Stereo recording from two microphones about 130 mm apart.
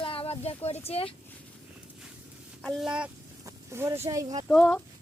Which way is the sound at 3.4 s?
25° right (ahead or behind).